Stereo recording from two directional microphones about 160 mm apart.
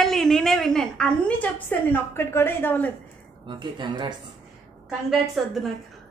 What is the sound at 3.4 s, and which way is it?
Speech, 30° right (ahead or behind).